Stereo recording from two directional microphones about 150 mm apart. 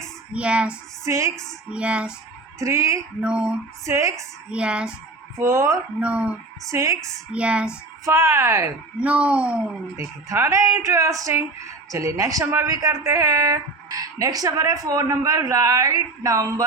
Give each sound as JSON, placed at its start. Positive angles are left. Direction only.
{"t": 0.3, "sound": "speech", "side_deg": -10}
{"t": 1.0, "sound": "a woman's voice", "side_deg": -20}
{"t": 1.7, "sound": "speech", "side_deg": -10}
{"t": 2.6, "sound": "a woman's voice", "side_deg": -20}
{"t": 3.2, "sound": "speech", "side_deg": -5}
{"t": 3.8, "sound": "a woman's voice", "side_deg": -20}
{"t": 4.4, "sound": "speech", "side_deg": -5}
{"t": 5.4, "sound": "a woman's voice", "side_deg": -20}
{"t": 6.0, "sound": "speech", "side_deg": -10}
{"t": 6.7, "sound": "a woman's voice", "side_deg": -20}
{"t": 7.3, "sound": "speech", "side_deg": -10}
{"t": 8.0, "sound": "a woman's voice", "side_deg": -20}
{"t": 9.0, "sound": "speech", "side_deg": -10}
{"t": 10.2, "sound": "a woman's voice", "side_deg": -20}